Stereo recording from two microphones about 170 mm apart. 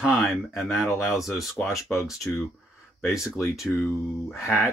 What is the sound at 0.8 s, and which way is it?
Speech, 15° left (ahead or behind).